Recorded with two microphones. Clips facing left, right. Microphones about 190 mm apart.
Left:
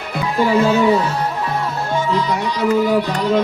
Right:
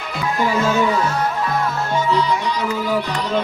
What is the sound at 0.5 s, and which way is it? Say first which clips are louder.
Speech: left 7 dB; 35° left (ahead or behind).